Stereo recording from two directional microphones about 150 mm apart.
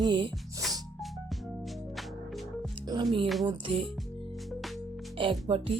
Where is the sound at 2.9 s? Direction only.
30° right (ahead or behind).